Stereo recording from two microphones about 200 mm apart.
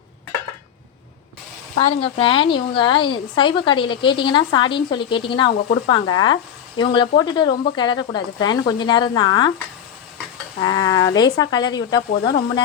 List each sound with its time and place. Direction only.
2.0 s a woman's voice: 25° left (ahead or behind)
10.6 s a woman's voice: 20° left (ahead or behind)